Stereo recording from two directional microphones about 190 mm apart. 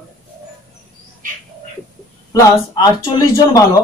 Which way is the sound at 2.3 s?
20° left (ahead or behind).